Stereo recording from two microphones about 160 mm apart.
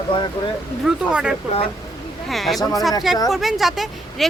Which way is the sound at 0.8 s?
5° right (ahead or behind).